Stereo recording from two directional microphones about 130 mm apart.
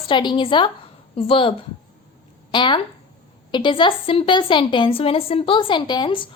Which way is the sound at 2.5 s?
40° left (ahead or behind).